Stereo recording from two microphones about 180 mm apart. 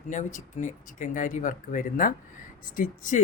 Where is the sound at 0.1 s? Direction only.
45° left (ahead or behind).